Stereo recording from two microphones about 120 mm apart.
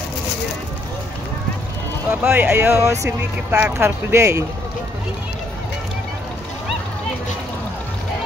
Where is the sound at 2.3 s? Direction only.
15° right (ahead or behind).